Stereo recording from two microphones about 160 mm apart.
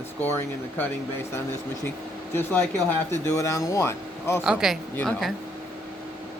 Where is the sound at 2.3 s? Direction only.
10° left (ahead or behind).